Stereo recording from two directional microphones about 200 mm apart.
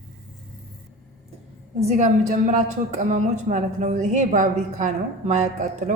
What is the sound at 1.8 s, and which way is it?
A woman's voice, 35° right (ahead or behind).